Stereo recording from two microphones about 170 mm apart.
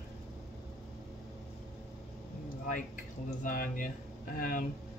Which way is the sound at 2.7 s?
55° left (ahead or behind).